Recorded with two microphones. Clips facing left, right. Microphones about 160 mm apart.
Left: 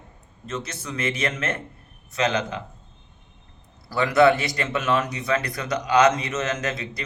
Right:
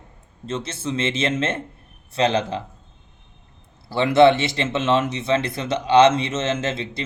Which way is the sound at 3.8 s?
25° right (ahead or behind).